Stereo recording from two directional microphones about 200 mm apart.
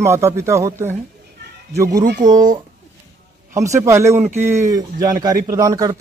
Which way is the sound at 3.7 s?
15° right (ahead or behind).